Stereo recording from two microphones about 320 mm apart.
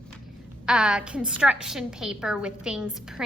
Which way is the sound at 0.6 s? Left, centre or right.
Centre.